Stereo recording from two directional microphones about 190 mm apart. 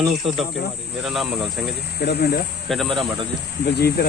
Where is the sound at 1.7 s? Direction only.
60° left (ahead or behind).